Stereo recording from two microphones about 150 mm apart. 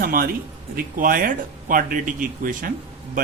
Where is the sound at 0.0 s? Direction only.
75° right (ahead or behind).